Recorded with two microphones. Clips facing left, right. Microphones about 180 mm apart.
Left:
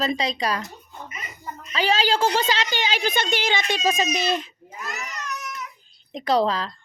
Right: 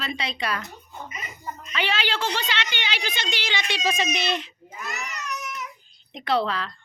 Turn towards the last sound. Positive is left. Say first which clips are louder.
# left 3 dB
turn(degrees=35)  # may be behind; listen again after turning